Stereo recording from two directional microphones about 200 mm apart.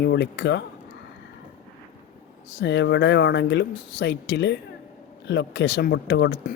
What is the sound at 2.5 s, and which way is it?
Speech, 60° left (ahead or behind).